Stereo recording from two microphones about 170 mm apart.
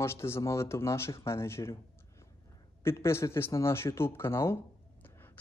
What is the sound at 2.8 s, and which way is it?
Speech, 15° left (ahead or behind).